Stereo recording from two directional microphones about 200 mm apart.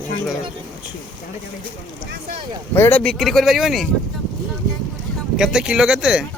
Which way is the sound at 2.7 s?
10° left (ahead or behind).